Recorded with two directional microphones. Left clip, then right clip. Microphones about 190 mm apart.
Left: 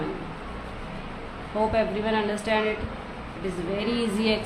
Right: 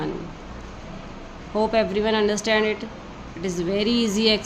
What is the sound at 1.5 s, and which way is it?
Speech, 50° right (ahead or behind).